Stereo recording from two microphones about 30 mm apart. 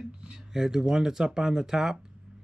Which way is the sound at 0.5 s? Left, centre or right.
Right.